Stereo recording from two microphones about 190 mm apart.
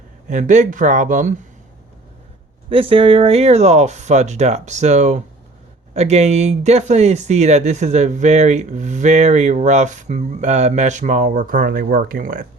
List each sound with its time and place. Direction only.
0.3 s speech: 40° right (ahead or behind)
2.6 s speech: 30° right (ahead or behind); by 12.5 s 50° right (ahead or behind)